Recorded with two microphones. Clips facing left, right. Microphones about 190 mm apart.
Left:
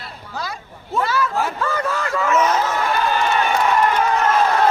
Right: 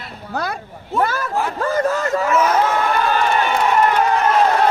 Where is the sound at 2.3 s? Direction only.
10° right (ahead or behind).